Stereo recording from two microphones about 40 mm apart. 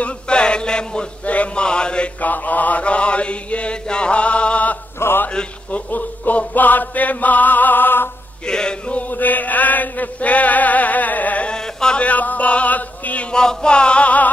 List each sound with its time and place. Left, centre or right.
0.0 s chant: left
1.2 s mantra: left
2.2 s mantra: left
5.0 s mantra: left
5.7 s chant: left
8.5 s music: left
8.9 s chant: left
11.4 s sheep: left
12.0 s chant: left
13.3 s male singing: left